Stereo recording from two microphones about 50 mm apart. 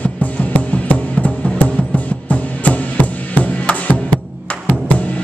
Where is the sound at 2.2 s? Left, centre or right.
Left.